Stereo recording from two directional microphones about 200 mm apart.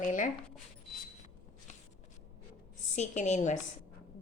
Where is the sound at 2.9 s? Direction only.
35° left (ahead or behind).